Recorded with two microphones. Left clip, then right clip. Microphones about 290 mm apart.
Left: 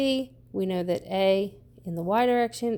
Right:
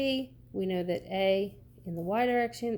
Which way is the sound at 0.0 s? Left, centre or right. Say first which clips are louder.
Left 4 dB; left.